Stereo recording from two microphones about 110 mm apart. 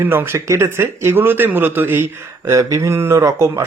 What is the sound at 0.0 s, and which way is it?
Speech, 20° right (ahead or behind).